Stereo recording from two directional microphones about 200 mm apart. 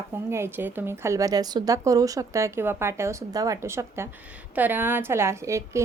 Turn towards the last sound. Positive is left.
turn(degrees=-15)  # may be behind; listen again after turning